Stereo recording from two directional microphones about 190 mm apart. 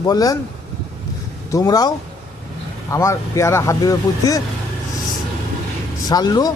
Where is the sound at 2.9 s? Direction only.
15° left (ahead or behind).